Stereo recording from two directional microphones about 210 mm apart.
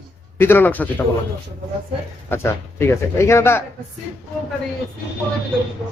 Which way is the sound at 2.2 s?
10° left (ahead or behind).